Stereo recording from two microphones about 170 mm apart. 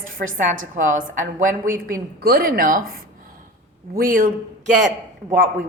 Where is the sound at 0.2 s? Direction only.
60° right (ahead or behind).